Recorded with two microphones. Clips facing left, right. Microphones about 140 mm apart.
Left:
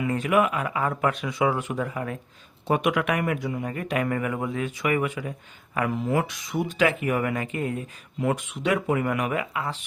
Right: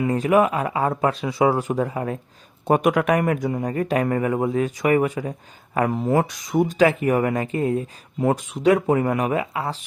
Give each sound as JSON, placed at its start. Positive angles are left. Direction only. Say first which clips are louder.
{"t": 0.0, "sound": "speech", "louder": "right 4 dB", "side_deg": -35}
{"t": 2.6, "sound": "speech", "louder": "right 5 dB", "side_deg": -40}